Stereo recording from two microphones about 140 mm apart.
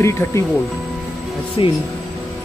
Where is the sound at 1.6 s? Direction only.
35° left (ahead or behind).